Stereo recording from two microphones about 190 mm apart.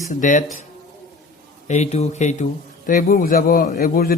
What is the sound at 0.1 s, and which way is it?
Speech, 40° left (ahead or behind).